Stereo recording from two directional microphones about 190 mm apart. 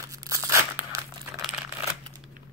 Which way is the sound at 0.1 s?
15° right (ahead or behind).